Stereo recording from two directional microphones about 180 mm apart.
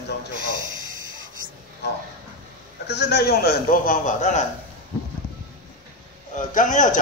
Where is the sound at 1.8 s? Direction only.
70° left (ahead or behind); by 4.4 s 40° left (ahead or behind).